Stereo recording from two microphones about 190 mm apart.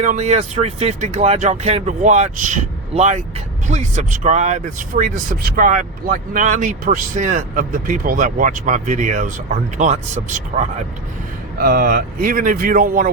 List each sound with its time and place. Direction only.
0.0 s speech: 40° right (ahead or behind)